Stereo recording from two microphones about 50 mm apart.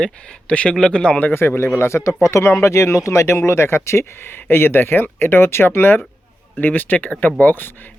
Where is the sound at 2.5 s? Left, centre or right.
Left.